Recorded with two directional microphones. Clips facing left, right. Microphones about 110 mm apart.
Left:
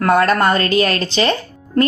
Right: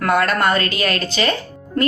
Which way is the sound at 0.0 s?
30° left (ahead or behind).